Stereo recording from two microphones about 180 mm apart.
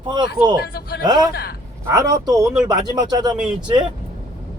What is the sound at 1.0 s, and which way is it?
Speech, 25° right (ahead or behind).